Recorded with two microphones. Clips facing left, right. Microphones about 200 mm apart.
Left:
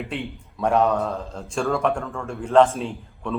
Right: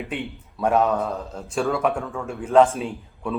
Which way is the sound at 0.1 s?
Centre (ahead or behind).